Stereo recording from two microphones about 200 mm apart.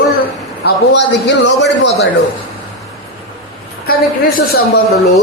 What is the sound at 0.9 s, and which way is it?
Speech, 65° left (ahead or behind).